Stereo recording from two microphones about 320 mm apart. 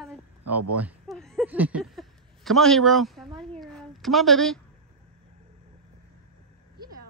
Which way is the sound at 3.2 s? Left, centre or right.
Centre.